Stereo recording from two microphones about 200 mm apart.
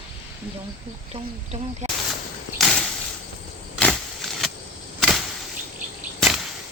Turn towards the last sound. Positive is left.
turn(degrees=0)  # may be behind; listen again after turning